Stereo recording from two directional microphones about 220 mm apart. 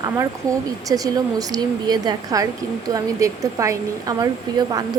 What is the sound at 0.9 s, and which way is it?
A woman's voice, 15° right (ahead or behind).